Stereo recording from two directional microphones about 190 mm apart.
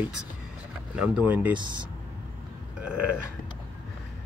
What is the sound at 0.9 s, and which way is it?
Speech, 10° right (ahead or behind).